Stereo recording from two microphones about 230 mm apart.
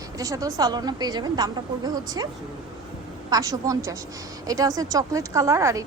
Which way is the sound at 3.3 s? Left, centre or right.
Centre.